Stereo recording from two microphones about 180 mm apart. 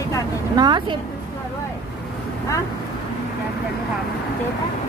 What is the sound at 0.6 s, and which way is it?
Speech, 25° right (ahead or behind).